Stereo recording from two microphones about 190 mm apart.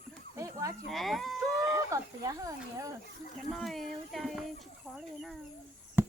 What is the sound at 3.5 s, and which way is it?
Speech, centre (ahead or behind).